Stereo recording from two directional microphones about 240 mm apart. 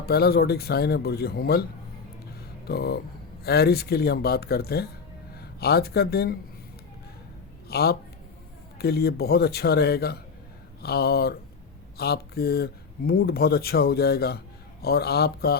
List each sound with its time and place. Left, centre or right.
0.0 s speech: left
2.6 s speech: left
7.7 s speech: left